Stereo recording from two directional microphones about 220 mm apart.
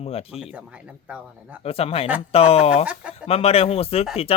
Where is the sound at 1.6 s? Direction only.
25° left (ahead or behind).